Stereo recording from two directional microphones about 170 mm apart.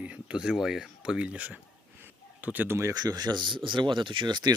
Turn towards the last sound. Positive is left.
turn(degrees=-25)  # may be behind; listen again after turning